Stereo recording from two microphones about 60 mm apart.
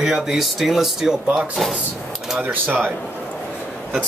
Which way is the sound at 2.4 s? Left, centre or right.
Right.